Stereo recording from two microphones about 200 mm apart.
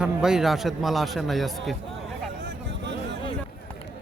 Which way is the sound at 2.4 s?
60° right (ahead or behind).